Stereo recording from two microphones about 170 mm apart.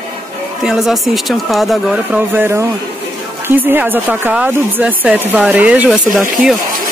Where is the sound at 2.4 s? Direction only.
15° right (ahead or behind).